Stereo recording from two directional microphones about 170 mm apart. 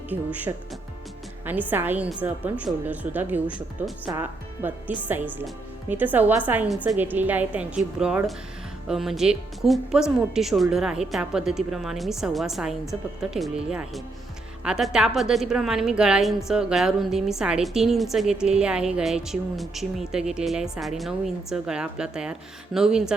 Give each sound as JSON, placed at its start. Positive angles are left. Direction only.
{"t": 0.1, "sound": "a woman's voice", "side_deg": -15}